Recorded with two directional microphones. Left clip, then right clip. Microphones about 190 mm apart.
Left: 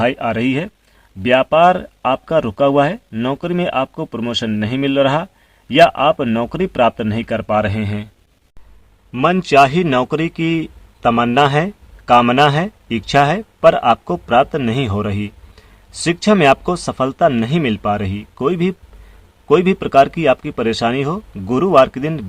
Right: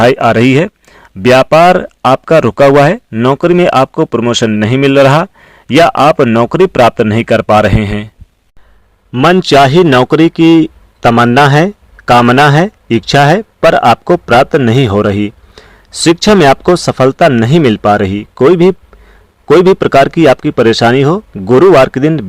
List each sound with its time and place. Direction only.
0.0 s a man's voice: 45° right (ahead or behind)
9.1 s a man's voice: 35° right (ahead or behind)
19.8 s a man's voice: 40° right (ahead or behind)